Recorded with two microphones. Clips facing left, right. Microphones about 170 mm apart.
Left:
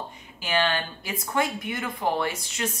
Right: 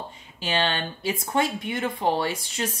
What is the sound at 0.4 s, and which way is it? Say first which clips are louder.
A woman's voice: even; 30° right (ahead or behind).